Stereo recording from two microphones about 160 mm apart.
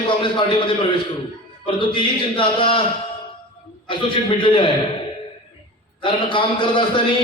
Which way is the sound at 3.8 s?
30° left (ahead or behind).